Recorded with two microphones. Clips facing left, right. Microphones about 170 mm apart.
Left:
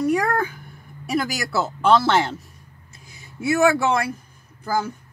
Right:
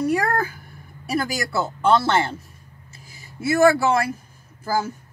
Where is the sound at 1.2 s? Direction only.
Centre (ahead or behind).